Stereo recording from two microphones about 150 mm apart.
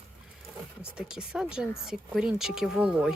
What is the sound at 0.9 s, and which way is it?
Speech, 5° right (ahead or behind).